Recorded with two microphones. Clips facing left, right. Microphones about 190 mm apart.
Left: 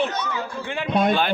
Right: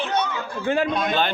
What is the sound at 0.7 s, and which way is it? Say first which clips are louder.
Speech: right 10 dB; 40° right (ahead or behind).